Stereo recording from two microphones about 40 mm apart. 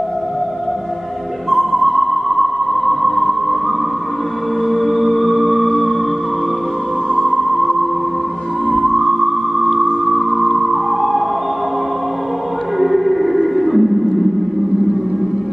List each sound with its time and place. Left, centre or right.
1.5 s music: centre
4.6 s music: centre
7.2 s music: centre
8.6 s music: centre
12.7 s music: centre